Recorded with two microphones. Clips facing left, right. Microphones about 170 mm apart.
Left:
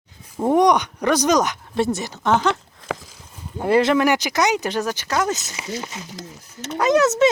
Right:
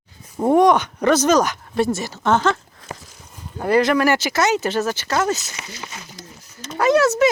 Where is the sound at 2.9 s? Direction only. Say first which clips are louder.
Left 7 dB; 90° left.